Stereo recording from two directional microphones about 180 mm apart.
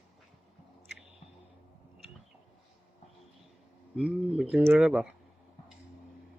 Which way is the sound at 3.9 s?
5° right (ahead or behind).